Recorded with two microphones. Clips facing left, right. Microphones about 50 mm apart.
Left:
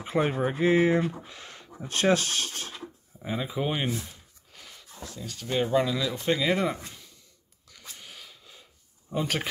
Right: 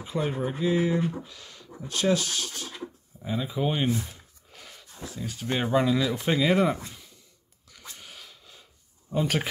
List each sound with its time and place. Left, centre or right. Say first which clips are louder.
0.0 s speech: left 3 dB; left
3.2 s speech: right 1 dB; centre
4.5 s a sound: right 1 dB; centre
5.2 s speech: left 1 dB; centre
7.7 s a sound: right 1 dB; centre
9.1 s speech: right 2 dB; centre